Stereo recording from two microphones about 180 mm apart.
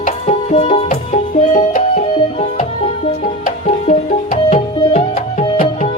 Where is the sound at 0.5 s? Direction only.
30° left (ahead or behind).